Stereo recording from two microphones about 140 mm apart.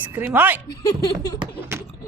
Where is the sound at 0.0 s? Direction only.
15° right (ahead or behind).